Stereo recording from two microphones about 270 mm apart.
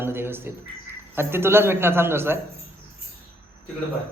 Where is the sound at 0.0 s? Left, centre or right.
Centre.